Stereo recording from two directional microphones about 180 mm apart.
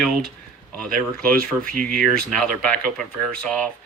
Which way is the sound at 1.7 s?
50° right (ahead or behind).